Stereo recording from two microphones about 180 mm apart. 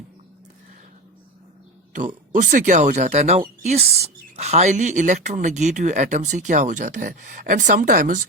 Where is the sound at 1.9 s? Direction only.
45° right (ahead or behind).